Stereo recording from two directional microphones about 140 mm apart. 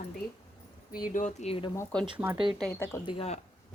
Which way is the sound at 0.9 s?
80° left.